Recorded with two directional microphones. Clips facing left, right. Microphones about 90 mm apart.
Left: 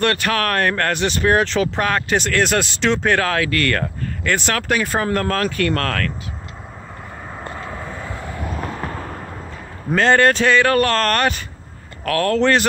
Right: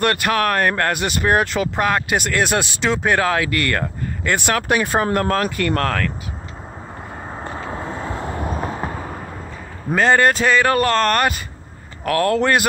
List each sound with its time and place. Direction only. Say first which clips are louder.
0.0 s speech: right 1 dB; 15° right (ahead or behind)
7.3 s vehicle: right 2 dB; 25° right (ahead or behind)
9.0 s a sound: right 1 dB; 5° right (ahead or behind)
9.8 s speech: left 1 dB; 10° right (ahead or behind)